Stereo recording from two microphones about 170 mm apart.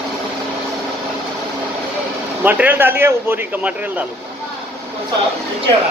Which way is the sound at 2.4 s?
10° right (ahead or behind).